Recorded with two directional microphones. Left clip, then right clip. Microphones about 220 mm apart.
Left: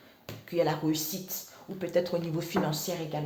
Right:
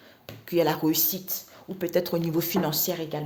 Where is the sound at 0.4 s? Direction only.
50° right (ahead or behind).